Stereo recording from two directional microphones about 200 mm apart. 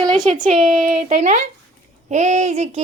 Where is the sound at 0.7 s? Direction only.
35° right (ahead or behind).